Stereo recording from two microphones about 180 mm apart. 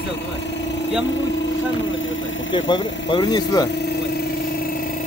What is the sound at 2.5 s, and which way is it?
Speech, 25° left (ahead or behind).